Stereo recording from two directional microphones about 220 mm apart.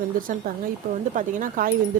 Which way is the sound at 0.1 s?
40° right (ahead or behind).